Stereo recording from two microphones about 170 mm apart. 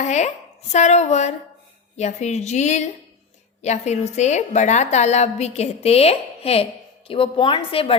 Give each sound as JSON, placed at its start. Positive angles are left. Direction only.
{"t": 0.0, "sound": "a woman's voice", "side_deg": 45}